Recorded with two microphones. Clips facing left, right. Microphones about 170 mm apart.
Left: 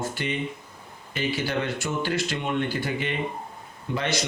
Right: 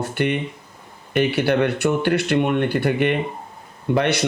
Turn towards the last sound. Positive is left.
turn(degrees=-60)  # may be behind; listen again after turning